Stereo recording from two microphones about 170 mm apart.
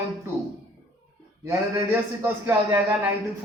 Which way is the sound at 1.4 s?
15° right (ahead or behind).